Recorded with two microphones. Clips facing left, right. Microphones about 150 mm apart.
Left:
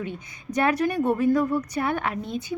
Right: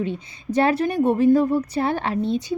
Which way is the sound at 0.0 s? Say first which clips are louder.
Right 6 dB; 25° right (ahead or behind).